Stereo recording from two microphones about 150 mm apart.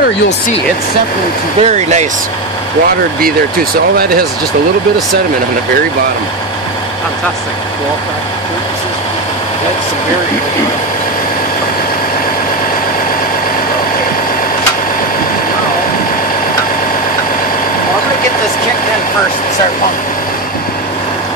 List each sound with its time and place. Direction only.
1.6 s speech: 50° right (ahead or behind)